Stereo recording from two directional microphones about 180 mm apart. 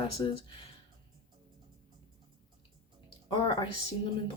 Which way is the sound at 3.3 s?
25° left (ahead or behind).